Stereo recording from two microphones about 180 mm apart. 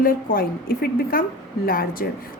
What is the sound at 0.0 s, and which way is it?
A woman's voice, 50° left (ahead or behind).